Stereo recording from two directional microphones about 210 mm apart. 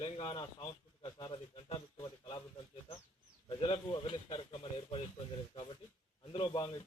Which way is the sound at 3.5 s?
25° left (ahead or behind).